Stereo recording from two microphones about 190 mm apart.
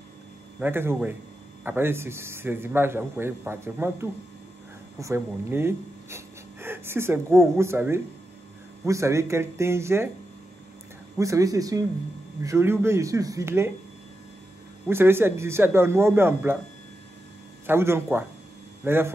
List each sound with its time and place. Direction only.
0.6 s speech: 10° right (ahead or behind)
11.1 s speech: 15° right (ahead or behind)
14.9 s speech: 10° right (ahead or behind)
17.6 s speech: 15° right (ahead or behind)